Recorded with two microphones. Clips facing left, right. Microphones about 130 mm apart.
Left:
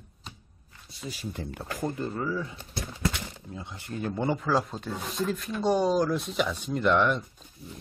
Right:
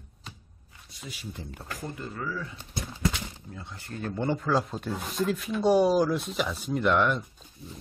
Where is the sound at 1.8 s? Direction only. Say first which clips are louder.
Left 6 dB; 35° left (ahead or behind).